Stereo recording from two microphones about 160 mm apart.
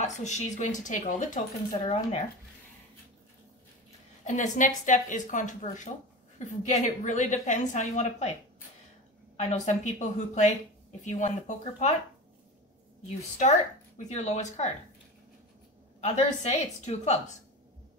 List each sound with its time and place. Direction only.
0.0 s a woman's voice: 45° left (ahead or behind)
4.2 s a woman's voice: 55° left (ahead or behind)
9.4 s a woman's voice: 45° left (ahead or behind)
13.4 s a woman's voice: 45° left (ahead or behind)
16.0 s a woman's voice: 45° left (ahead or behind)